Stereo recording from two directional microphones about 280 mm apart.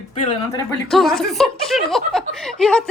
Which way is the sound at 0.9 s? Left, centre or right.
Centre.